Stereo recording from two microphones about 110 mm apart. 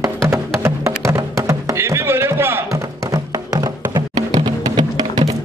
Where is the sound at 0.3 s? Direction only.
25° right (ahead or behind).